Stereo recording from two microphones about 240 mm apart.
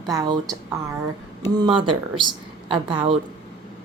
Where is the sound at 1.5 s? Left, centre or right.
Centre.